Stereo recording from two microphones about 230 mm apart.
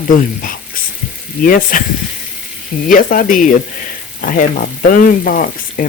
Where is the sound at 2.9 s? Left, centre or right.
Left.